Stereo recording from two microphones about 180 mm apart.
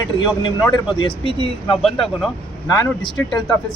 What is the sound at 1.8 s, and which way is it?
Speech, centre (ahead or behind).